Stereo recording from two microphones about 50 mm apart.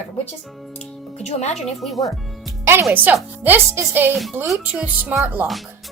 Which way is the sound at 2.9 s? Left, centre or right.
Right.